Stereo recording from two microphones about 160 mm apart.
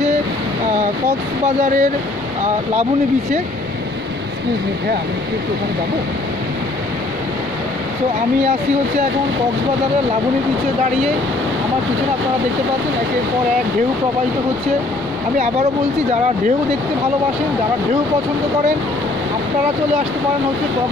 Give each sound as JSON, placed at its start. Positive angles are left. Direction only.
{"t": 1.6, "sound": "speech", "side_deg": -55}